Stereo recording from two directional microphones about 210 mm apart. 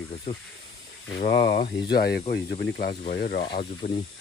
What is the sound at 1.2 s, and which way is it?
Speech, 55° left (ahead or behind).